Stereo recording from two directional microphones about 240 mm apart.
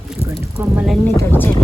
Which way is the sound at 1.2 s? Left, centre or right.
Centre.